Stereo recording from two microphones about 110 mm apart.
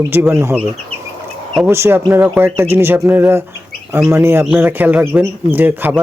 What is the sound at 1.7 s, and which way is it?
Speech, 20° right (ahead or behind).